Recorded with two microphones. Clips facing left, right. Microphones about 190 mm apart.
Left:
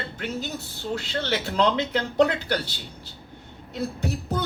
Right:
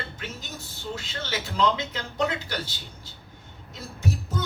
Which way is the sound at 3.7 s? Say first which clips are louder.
Left 3 dB; 65° left (ahead or behind).